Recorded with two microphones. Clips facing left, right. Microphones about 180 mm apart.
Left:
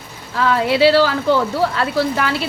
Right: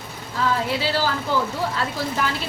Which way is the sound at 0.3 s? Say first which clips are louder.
Left 7 dB; 75° left (ahead or behind).